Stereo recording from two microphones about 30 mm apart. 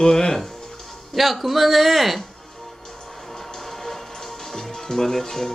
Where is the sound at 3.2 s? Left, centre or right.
Centre.